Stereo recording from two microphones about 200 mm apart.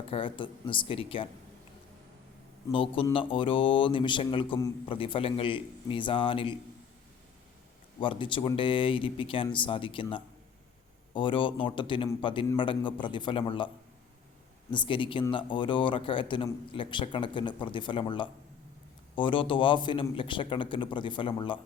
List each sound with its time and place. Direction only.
0.1 s speech: 25° left (ahead or behind)
2.7 s speech: 25° left (ahead or behind)
8.0 s speech: 25° left (ahead or behind)
14.7 s speech: 25° left (ahead or behind)